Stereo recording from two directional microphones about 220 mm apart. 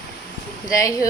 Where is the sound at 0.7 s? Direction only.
15° left (ahead or behind).